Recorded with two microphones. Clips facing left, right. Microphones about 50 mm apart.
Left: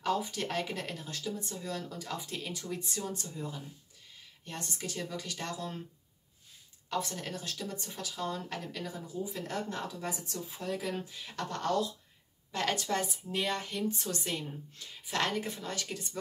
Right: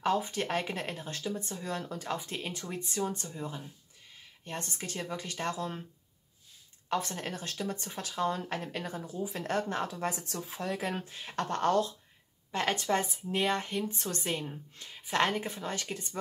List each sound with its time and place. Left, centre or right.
0.0 s speech: right
6.9 s speech: right
9.0 s a woman's voice: right
10.1 s speech: right
10.8 s speech: right
12.4 s speech: right